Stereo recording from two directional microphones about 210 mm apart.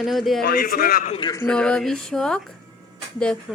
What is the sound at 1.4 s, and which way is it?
Speech, 5° left (ahead or behind).